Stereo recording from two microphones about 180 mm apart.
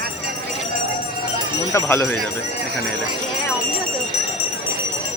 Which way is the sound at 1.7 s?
10° left (ahead or behind).